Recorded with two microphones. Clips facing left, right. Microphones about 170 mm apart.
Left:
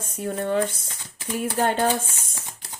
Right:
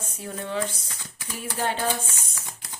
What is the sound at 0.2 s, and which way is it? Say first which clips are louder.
Speech: left 6 dB; 50° left (ahead or behind).